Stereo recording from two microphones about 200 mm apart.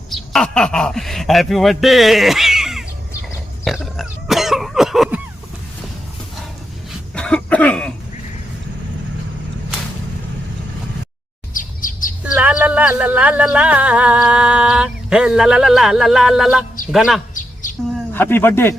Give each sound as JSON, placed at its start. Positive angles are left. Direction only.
{"t": 0.1, "sound": "speech", "side_deg": 5}
{"t": 3.9, "sound": "cough", "side_deg": 0}
{"t": 7.1, "sound": "cough", "side_deg": 5}
{"t": 11.5, "sound": "chirp", "side_deg": 40}
{"t": 12.2, "sound": "a man's voice", "side_deg": -5}
{"t": 17.3, "sound": "a sound", "side_deg": 40}
{"t": 18.1, "sound": "speech", "side_deg": 10}